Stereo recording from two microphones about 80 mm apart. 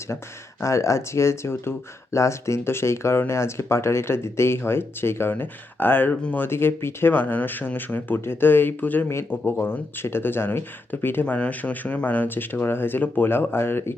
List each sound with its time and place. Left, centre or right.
0.6 s speech: left